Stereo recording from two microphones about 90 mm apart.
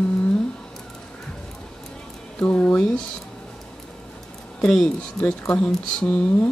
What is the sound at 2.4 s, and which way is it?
Speech, 15° left (ahead or behind).